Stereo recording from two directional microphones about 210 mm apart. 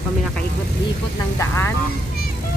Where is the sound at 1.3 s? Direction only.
10° left (ahead or behind).